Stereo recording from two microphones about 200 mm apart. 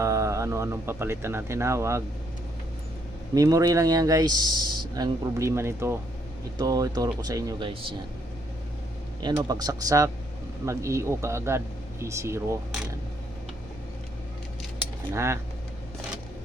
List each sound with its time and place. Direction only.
0.0 s speech: 15° right (ahead or behind)
3.3 s speech: 15° right (ahead or behind)
9.2 s speech: 20° right (ahead or behind)
15.1 s speech: 15° right (ahead or behind)